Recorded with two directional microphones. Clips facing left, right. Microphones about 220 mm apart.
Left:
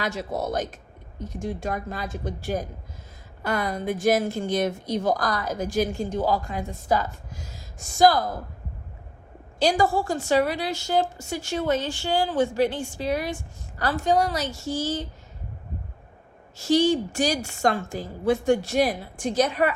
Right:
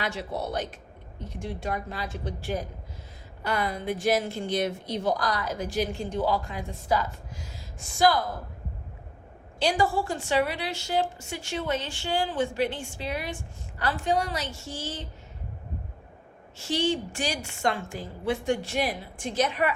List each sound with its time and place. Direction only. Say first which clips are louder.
0.0 s a woman's voice: left 3 dB; 45° left (ahead or behind)
9.6 s a woman's voice: left 3 dB; 40° left (ahead or behind)
16.6 s a woman's voice: left 7 dB; 40° left (ahead or behind)